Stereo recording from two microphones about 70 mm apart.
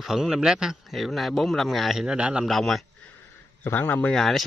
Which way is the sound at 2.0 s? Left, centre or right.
Centre.